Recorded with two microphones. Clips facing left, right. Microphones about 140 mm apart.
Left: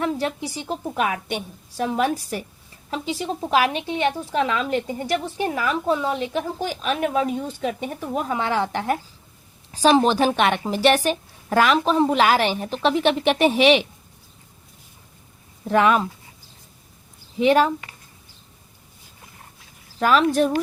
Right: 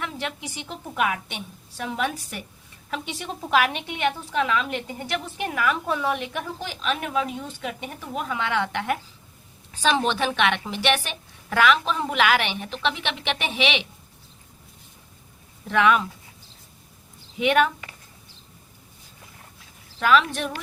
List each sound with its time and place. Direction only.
0.0 s a woman's voice: 35° left (ahead or behind)
15.6 s a woman's voice: 40° left (ahead or behind)
17.3 s a woman's voice: 35° left (ahead or behind)
20.0 s a woman's voice: 40° left (ahead or behind)